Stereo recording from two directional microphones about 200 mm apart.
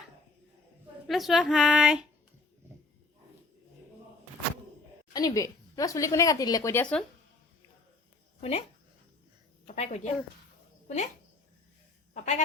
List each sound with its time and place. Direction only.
1.0 s a woman's voice: centre (ahead or behind)
5.1 s a woman's voice: 15° left (ahead or behind)
8.4 s speech: 30° left (ahead or behind)
9.6 s a woman's voice: 35° left (ahead or behind)
12.1 s speech: 35° left (ahead or behind)